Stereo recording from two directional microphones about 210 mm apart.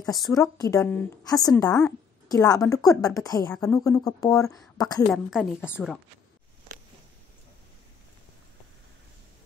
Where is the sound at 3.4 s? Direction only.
5° left (ahead or behind).